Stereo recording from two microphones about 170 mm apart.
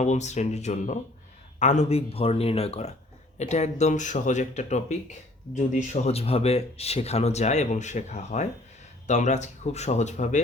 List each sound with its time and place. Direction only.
0.0 s speech: 45° left (ahead or behind)